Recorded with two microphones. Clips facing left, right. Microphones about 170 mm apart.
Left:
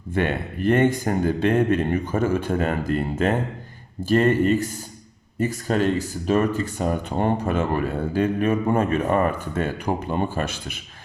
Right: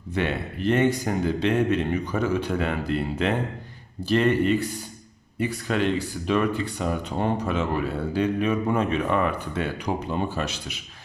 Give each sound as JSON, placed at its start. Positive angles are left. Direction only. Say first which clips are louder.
{"t": 0.1, "sound": "speech", "louder": "left 3 dB", "side_deg": 50}